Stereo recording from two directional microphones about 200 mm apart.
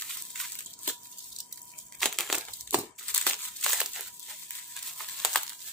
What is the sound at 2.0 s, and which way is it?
Crushing, centre (ahead or behind).